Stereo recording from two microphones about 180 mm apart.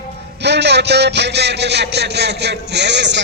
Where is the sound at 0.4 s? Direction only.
70° right (ahead or behind).